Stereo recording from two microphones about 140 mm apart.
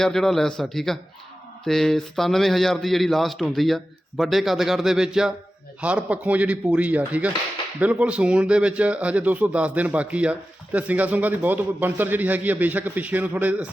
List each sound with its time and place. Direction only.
0.0 s a man's voice: centre (ahead or behind)